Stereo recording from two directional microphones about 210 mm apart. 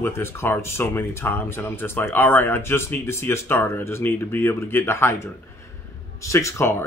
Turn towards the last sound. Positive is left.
turn(degrees=15)  # may be behind; listen again after turning